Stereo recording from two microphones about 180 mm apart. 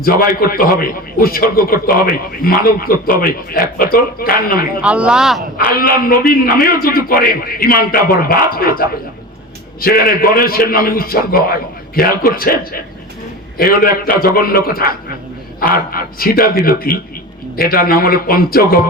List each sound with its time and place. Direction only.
0.0 s a man's voice: 55° left (ahead or behind)
4.8 s speech: 5° right (ahead or behind)
6.4 s a man's voice: 55° left (ahead or behind)